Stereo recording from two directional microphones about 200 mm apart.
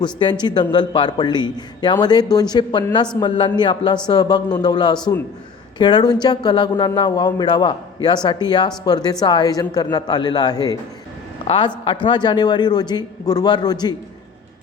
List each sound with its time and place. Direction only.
0.0 s a man's voice: 20° left (ahead or behind)